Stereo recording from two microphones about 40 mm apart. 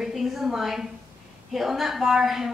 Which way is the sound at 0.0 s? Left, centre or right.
Centre.